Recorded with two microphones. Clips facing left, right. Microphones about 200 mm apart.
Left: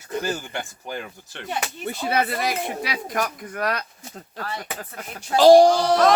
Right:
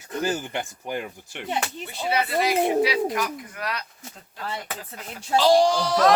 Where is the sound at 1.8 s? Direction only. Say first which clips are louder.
Left 5 dB; 50° left (ahead or behind).